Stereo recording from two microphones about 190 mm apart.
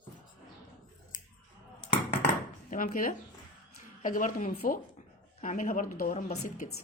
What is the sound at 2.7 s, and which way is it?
Speech, 45° left (ahead or behind).